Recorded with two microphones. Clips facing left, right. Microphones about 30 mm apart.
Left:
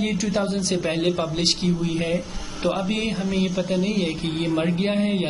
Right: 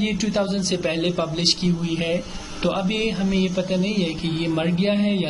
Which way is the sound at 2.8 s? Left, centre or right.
Centre.